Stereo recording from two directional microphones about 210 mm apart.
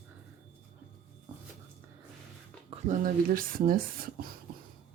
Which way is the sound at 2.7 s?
40° right (ahead or behind).